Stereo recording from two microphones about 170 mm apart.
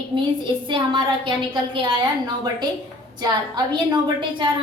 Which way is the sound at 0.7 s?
30° right (ahead or behind).